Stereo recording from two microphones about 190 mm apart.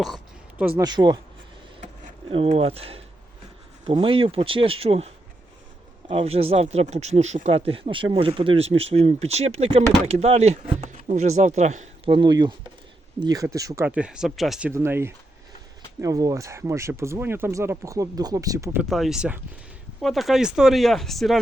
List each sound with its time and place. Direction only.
0.8 s speech: 20° right (ahead or behind)
2.3 s speech: 30° right (ahead or behind)
12.1 s speech: 25° right (ahead or behind); by 14.7 s centre (ahead or behind)
14.7 s speech: 15° right (ahead or behind)
18.9 s speech: centre (ahead or behind)